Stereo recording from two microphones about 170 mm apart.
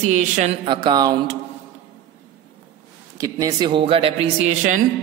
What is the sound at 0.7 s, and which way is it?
Speech, 25° right (ahead or behind).